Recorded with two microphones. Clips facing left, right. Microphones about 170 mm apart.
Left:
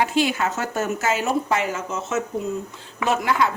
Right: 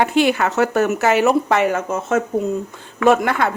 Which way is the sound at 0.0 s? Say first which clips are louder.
Right 5 dB; 60° right (ahead or behind).